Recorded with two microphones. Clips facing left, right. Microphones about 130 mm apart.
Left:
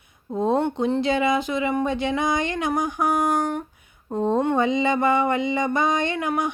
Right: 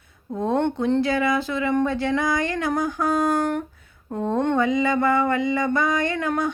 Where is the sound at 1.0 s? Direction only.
20° left (ahead or behind).